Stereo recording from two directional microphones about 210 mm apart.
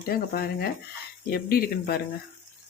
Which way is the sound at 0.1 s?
45° left (ahead or behind).